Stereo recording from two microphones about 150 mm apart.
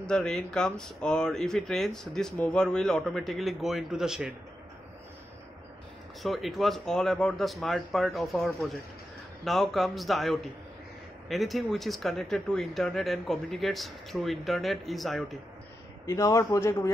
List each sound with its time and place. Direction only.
0.0 s speech: 5° left (ahead or behind)
6.2 s speech: centre (ahead or behind)
16.1 s a man's voice: 20° left (ahead or behind)